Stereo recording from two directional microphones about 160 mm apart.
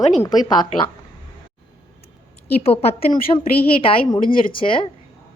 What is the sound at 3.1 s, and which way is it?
Speech, 30° left (ahead or behind).